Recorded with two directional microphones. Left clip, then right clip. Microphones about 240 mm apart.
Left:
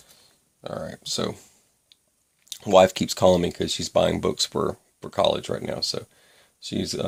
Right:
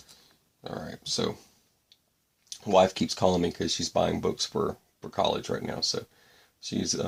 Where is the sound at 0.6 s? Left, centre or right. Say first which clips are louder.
Left 4 dB; left.